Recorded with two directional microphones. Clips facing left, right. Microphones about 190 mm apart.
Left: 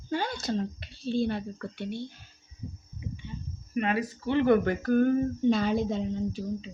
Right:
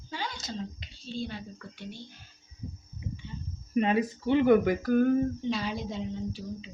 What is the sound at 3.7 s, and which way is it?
Speech, 25° right (ahead or behind).